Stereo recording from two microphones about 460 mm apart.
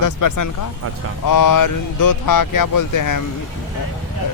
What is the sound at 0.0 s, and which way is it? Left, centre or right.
Speech, left.